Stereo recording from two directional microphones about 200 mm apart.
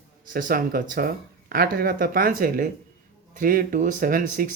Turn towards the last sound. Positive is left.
turn(degrees=-40)  # may be behind; listen again after turning